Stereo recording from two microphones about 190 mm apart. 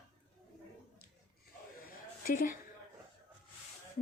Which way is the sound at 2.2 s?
50° left (ahead or behind).